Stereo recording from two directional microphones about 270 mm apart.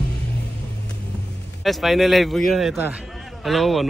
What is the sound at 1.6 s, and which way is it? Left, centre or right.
A man's voice, centre.